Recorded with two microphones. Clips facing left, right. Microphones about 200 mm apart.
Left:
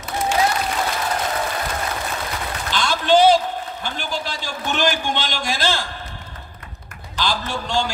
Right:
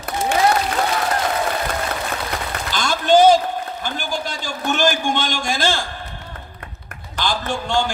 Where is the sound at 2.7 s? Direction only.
45° right (ahead or behind).